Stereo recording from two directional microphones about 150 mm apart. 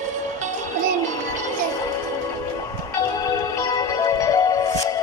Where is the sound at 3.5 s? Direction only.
25° left (ahead or behind).